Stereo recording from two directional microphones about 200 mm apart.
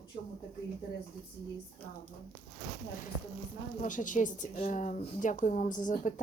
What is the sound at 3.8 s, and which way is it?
A woman's voice, 40° left (ahead or behind).